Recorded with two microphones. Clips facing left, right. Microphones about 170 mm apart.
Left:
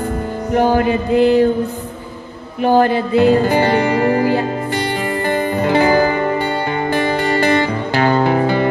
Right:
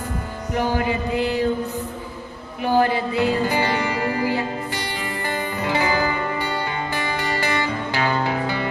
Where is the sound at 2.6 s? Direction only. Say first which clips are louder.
Left 6 dB; 60° left (ahead or behind).